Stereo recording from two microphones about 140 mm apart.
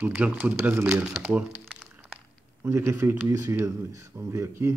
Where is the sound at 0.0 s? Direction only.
10° right (ahead or behind).